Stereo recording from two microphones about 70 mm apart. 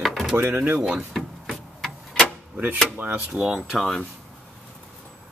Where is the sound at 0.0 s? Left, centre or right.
Centre.